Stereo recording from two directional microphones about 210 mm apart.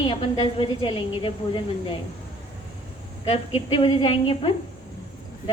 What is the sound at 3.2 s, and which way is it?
A woman's voice, 25° left (ahead or behind).